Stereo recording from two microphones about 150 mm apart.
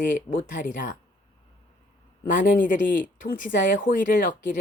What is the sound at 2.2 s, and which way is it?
Speech, 60° left (ahead or behind).